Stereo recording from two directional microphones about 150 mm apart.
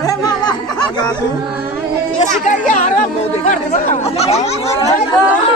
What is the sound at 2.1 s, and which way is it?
Speech, 55° left (ahead or behind).